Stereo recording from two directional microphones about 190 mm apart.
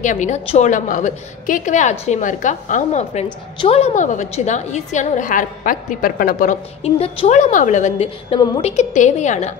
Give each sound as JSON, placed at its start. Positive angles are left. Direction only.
{"t": 0.0, "sound": "a woman's voice", "side_deg": 40}